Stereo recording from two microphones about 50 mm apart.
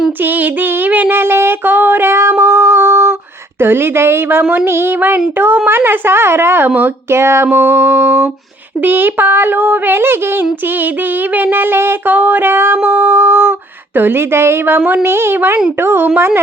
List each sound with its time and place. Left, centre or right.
0.2 s child singing: right
2.4 s humming: right
3.6 s speech: right
4.9 s a sound: right
5.6 s speech: right
7.1 s a sound: right
7.5 s speech: right
11.5 s speech: right
12.8 s a sound: right
13.9 s speech: right